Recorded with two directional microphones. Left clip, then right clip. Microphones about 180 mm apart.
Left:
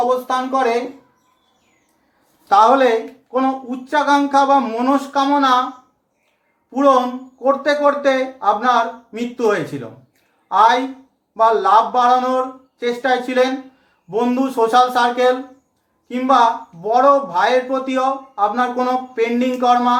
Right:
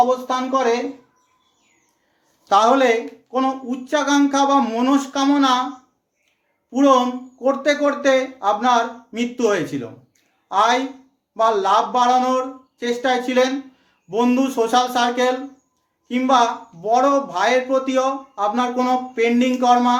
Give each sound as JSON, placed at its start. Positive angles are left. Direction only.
{"t": 2.5, "sound": "speech", "side_deg": -20}
{"t": 6.7, "sound": "speech", "side_deg": -20}